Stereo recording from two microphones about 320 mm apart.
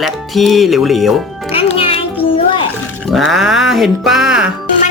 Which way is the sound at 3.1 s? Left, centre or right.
Centre.